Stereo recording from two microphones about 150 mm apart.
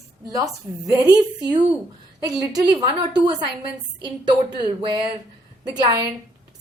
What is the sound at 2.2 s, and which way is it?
A woman's voice, 25° right (ahead or behind).